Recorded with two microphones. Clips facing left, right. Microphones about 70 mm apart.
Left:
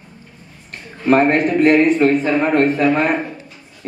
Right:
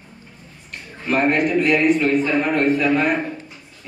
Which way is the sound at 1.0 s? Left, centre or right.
Left.